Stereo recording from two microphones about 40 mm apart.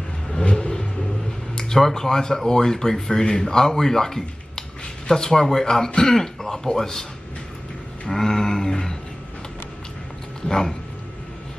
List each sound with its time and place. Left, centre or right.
0.3 s vehicle: centre
1.5 s speech: centre
8.1 s speech: centre